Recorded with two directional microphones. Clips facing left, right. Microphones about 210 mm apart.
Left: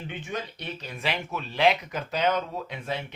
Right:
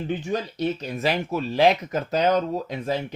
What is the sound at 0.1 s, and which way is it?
Speech, 40° right (ahead or behind).